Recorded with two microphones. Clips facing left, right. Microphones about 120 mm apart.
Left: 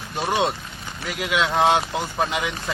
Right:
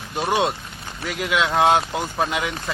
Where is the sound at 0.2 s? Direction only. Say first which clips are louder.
Right 1 dB; centre (ahead or behind).